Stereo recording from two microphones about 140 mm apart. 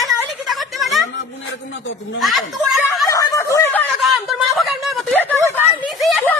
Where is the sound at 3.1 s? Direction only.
25° left (ahead or behind).